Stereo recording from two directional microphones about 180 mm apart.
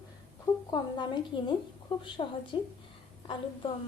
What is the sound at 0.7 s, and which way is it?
A woman's voice, 25° left (ahead or behind).